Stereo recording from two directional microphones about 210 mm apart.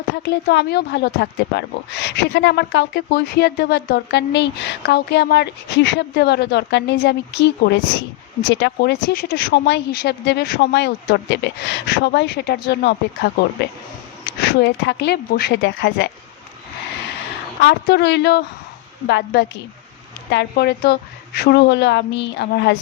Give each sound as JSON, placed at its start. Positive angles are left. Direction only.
{"t": 0.2, "sound": "speech", "side_deg": 55}
{"t": 17.6, "sound": "a woman's voice", "side_deg": 55}